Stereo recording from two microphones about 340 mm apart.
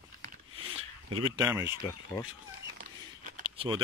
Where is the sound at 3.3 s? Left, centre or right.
Centre.